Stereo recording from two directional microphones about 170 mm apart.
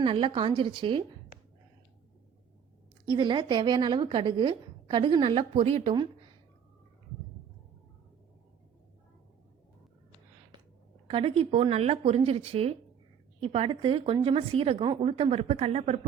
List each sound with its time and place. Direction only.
0.0 s a woman's voice: 30° right (ahead or behind)
3.1 s a woman's voice: 30° right (ahead or behind)
11.1 s a woman's voice: 30° right (ahead or behind)